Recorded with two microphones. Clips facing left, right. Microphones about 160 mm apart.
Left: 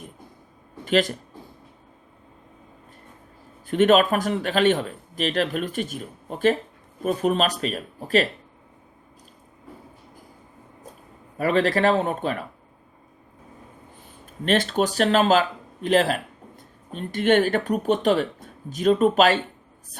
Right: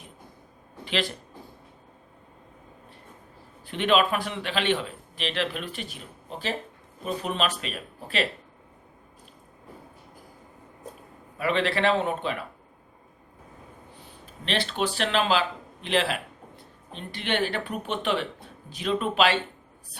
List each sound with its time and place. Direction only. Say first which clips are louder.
0.9 s speech: left 8 dB; 45° left (ahead or behind)
3.7 s a man's voice: left 6 dB; 45° left (ahead or behind)
11.3 s a man's voice: left 5 dB; 40° left (ahead or behind)
14.4 s a man's voice: left 6 dB; 45° left (ahead or behind)